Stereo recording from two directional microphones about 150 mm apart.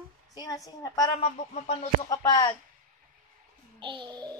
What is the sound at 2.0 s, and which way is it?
Speech, 25° left (ahead or behind).